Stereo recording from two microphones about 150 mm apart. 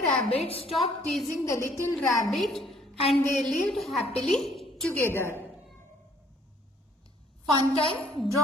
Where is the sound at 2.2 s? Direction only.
Centre (ahead or behind).